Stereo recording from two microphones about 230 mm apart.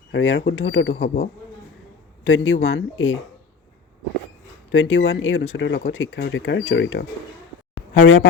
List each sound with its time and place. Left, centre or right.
0.1 s speech: left
4.7 s speech: left
7.8 s a sound: left